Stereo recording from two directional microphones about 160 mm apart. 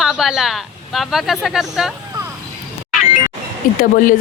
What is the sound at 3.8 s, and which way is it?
Speech, 55° left (ahead or behind).